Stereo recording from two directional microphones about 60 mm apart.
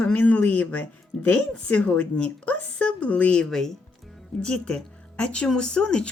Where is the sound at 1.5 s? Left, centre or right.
Centre.